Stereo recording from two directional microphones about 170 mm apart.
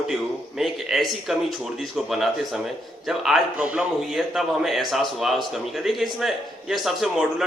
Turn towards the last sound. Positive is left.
turn(degrees=0)  # may be behind; listen again after turning